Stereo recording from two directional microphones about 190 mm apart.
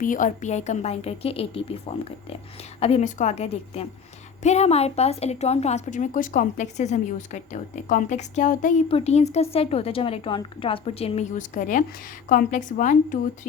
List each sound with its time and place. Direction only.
0.0 s a woman's voice: 45° left (ahead or behind)
2.8 s a woman's voice: 35° left (ahead or behind)